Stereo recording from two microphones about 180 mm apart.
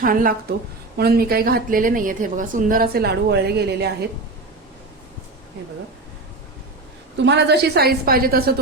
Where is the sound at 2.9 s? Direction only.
65° right (ahead or behind).